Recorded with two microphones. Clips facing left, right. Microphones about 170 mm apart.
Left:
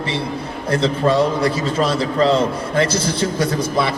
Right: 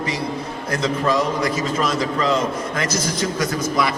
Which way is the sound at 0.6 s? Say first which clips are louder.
Left 4 dB; 30° left (ahead or behind).